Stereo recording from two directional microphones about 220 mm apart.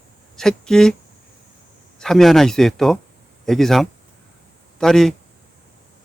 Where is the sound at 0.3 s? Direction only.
Centre (ahead or behind).